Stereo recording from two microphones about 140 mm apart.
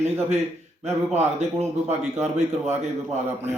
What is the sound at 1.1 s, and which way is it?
Speech, 50° right (ahead or behind).